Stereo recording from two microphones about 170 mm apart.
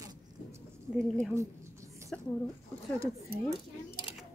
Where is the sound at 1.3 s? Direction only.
15° right (ahead or behind).